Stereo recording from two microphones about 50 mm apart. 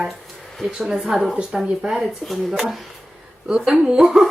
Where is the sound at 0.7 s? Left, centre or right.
Centre.